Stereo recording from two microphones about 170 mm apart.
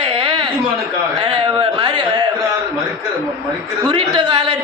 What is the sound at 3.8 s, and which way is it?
Speech, 25° right (ahead or behind).